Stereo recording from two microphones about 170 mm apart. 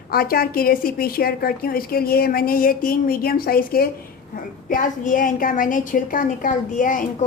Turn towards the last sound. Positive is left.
turn(degrees=50)  # may be behind; listen again after turning